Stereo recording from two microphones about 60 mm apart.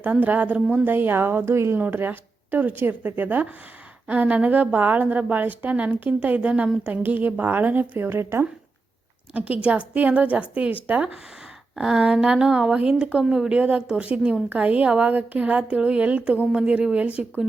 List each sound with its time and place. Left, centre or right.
0.0 s a woman's voice: right
1.8 s a woman's voice: right
9.3 s a woman's voice: right